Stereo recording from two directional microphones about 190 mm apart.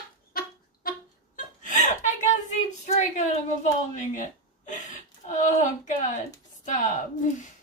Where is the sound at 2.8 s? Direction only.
35° left (ahead or behind).